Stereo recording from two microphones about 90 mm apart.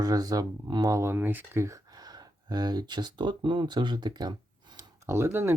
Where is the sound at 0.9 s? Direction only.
25° right (ahead or behind).